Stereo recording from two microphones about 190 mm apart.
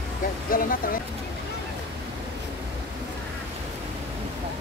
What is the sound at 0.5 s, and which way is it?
Speech, 50° left (ahead or behind).